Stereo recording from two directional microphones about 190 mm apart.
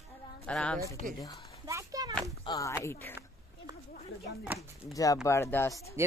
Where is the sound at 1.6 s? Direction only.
15° right (ahead or behind).